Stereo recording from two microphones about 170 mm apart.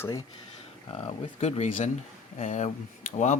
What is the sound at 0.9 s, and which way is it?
Speech, 40° left (ahead or behind).